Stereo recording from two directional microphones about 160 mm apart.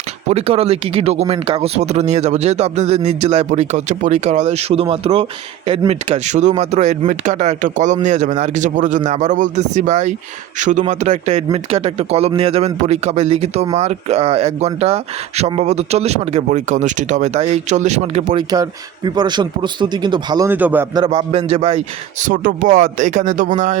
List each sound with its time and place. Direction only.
0.3 s a man's voice: 40° right (ahead or behind)
18.3 s speech: 25° right (ahead or behind)
20.5 s a man's voice: 10° right (ahead or behind)
20.9 s a man's voice: 30° right (ahead or behind)
22.2 s speech: 55° right (ahead or behind)